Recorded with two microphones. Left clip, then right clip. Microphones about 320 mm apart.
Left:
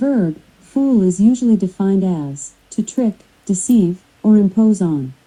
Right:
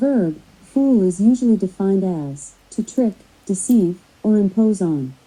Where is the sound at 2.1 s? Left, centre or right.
Left.